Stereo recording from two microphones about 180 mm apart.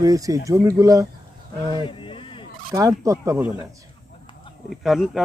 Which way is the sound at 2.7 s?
20° right (ahead or behind).